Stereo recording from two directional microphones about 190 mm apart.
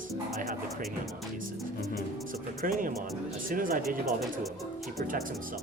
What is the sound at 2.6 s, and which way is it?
Speech, 45° right (ahead or behind).